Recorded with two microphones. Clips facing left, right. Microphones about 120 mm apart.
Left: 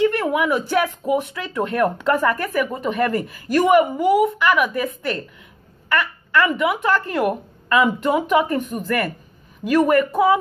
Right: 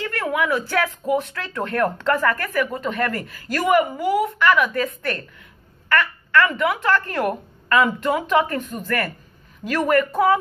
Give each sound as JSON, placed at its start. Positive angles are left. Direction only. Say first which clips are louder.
{"t": 0.0, "sound": "speech", "louder": "left 5 dB", "side_deg": 15}